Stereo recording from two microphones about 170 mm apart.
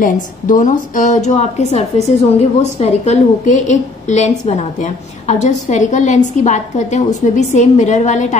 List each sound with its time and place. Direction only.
0.0 s a woman's voice: 50° left (ahead or behind)